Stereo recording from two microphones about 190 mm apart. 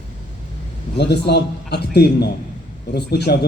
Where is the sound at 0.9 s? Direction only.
60° left (ahead or behind).